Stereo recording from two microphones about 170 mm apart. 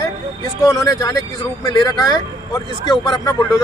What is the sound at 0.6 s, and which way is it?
Speech, 20° left (ahead or behind).